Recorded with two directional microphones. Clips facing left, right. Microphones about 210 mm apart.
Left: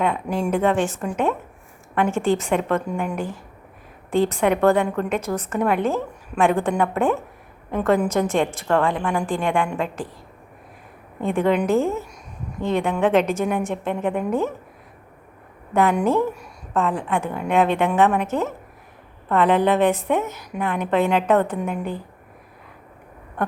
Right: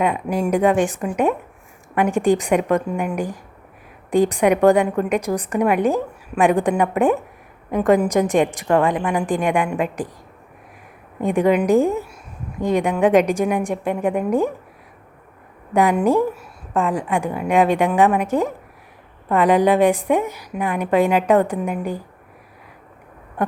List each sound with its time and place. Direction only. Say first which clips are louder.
0.0 s a woman's voice: right 2 dB; 10° right (ahead or behind)
11.2 s a woman's voice: right 3 dB; 15° right (ahead or behind)
15.7 s a woman's voice: right 2 dB; 10° right (ahead or behind)
23.4 s a sound: right 3 dB; 10° right (ahead or behind)